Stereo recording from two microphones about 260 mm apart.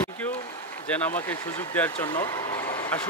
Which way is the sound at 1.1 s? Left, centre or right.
Centre.